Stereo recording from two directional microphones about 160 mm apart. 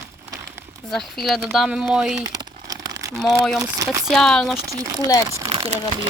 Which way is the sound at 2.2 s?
25° right (ahead or behind).